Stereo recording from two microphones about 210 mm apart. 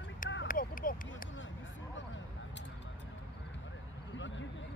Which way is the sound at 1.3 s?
65° left (ahead or behind).